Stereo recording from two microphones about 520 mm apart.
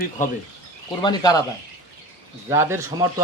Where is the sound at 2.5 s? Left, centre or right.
Centre.